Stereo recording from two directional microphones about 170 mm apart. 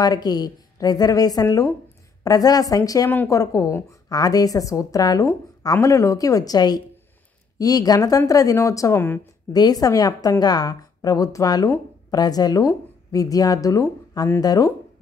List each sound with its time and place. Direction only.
0.0 s a woman's voice: 25° left (ahead or behind)